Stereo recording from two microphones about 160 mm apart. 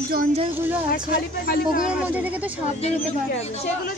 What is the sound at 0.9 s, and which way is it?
Speech, 65° left (ahead or behind).